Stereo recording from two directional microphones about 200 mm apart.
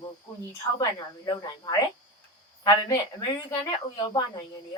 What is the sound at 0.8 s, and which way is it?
Speech, 15° left (ahead or behind).